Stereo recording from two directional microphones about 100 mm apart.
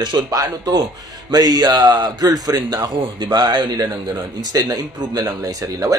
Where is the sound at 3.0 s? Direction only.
45° right (ahead or behind).